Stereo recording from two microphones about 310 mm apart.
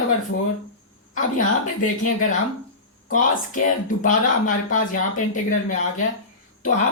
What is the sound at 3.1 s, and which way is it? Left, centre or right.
Speech, left.